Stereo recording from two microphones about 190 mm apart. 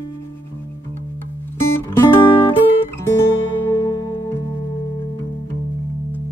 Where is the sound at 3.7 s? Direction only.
20° left (ahead or behind).